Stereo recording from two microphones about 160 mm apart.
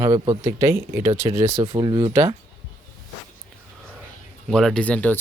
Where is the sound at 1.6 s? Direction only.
30° right (ahead or behind).